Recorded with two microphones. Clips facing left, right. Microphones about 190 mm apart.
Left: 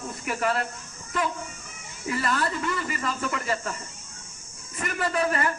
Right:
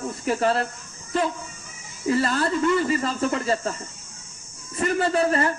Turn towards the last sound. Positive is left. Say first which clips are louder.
# right 4 dB
turn(degrees=-30)  # may be behind; listen again after turning